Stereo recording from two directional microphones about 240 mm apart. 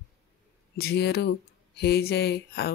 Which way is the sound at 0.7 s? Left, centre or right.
Left.